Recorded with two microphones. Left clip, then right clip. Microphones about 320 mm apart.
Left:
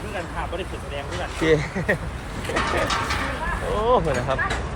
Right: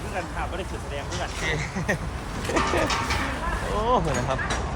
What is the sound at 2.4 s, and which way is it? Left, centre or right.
Speech, right.